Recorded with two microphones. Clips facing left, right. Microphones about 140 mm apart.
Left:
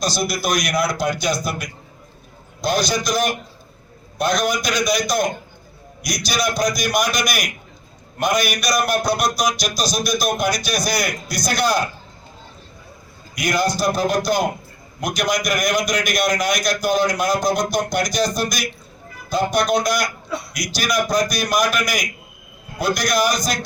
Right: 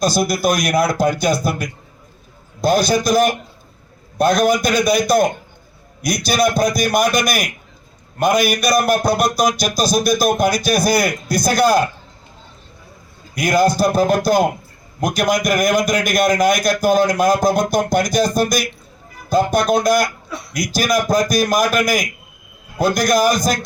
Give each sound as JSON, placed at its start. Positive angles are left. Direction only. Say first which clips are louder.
{"t": 0.1, "sound": "a man's voice", "louder": "right 5 dB", "side_deg": -50}
{"t": 13.4, "sound": "a man's voice", "louder": "right 5 dB", "side_deg": -50}